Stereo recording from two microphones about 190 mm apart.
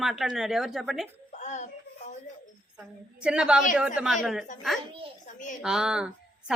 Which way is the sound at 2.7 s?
5° right (ahead or behind).